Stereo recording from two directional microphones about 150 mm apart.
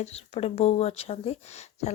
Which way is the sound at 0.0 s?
45° left (ahead or behind).